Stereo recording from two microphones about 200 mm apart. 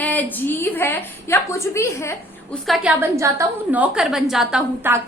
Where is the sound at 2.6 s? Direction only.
Centre (ahead or behind).